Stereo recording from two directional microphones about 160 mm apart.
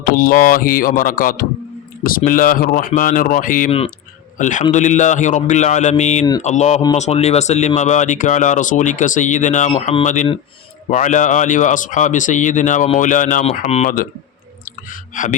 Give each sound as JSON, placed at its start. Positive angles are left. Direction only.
{"t": 0.0, "sound": "speech", "side_deg": 65}
{"t": 3.7, "sound": "speech", "side_deg": 35}
{"t": 4.4, "sound": "a man's voice", "side_deg": 50}
{"t": 15.1, "sound": "speech", "side_deg": 55}